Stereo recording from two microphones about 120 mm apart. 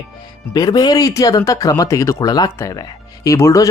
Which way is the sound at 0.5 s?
35° left (ahead or behind).